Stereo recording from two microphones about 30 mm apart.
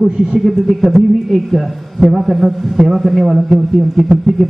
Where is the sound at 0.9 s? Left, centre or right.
Centre.